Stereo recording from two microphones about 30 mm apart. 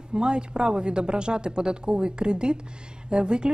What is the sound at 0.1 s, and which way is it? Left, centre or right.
A woman's voice, right.